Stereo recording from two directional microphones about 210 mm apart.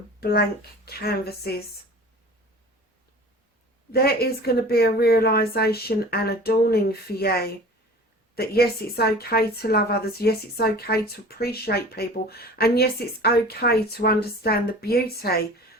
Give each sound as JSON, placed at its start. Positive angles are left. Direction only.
{"t": 0.2, "sound": "a child's voice", "side_deg": 45}
{"t": 3.9, "sound": "a woman's voice", "side_deg": 50}